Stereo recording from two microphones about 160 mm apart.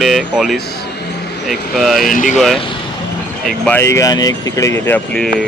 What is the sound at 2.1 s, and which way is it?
Speech, 55° left (ahead or behind).